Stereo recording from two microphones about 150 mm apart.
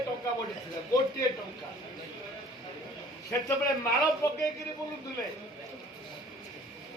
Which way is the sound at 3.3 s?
20° left (ahead or behind).